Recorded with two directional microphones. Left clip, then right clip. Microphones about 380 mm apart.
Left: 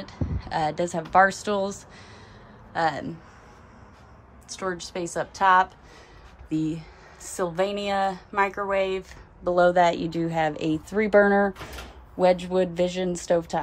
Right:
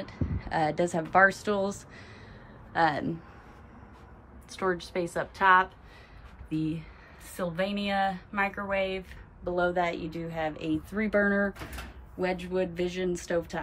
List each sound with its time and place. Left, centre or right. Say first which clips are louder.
0.4 s speech: left 2 dB; centre
4.5 s a woman's voice: even; centre